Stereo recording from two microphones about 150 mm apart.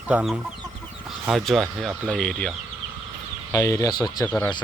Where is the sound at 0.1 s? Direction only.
10° right (ahead or behind).